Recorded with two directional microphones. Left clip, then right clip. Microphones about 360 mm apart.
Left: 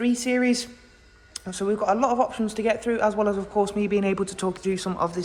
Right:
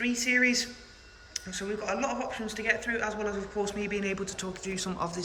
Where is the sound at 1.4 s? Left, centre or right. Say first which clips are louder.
Left 10 dB; left.